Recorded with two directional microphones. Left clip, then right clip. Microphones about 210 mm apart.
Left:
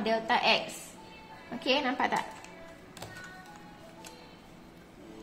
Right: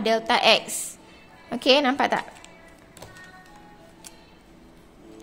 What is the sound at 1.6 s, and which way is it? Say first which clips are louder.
Speech: right 9 dB; 55° right (ahead or behind).